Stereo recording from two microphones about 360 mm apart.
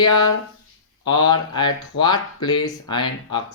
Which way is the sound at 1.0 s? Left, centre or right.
Centre.